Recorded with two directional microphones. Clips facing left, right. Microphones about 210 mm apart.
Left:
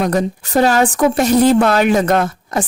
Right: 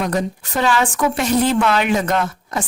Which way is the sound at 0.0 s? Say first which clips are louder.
Left 4 dB; 40° left (ahead or behind).